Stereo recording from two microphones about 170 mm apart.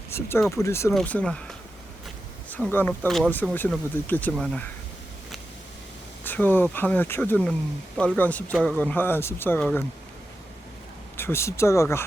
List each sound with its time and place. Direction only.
0.1 s speech: 15° left (ahead or behind)
2.5 s speech: 10° left (ahead or behind)
6.2 s speech: 10° left (ahead or behind)
11.2 s speech: 15° left (ahead or behind)